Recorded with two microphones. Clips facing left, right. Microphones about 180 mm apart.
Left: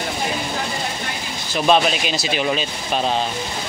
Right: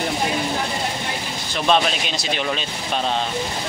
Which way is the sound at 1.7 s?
5° left (ahead or behind).